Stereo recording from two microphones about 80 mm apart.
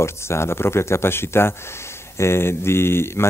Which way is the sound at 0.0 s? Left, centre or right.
Left.